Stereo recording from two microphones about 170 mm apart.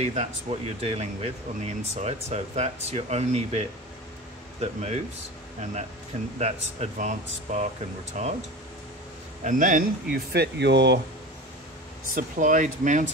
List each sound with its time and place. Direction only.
0.0 s speech: 40° right (ahead or behind)
6.4 s speech: 40° right (ahead or behind)
9.4 s speech: 50° right (ahead or behind); by 11.0 s 85° right
12.1 s speech: 50° right (ahead or behind)